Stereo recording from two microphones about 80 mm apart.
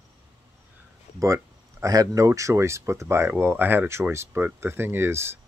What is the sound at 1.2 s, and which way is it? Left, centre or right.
Speech, right.